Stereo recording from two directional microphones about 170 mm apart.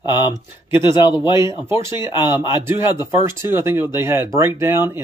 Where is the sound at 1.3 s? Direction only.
15° right (ahead or behind).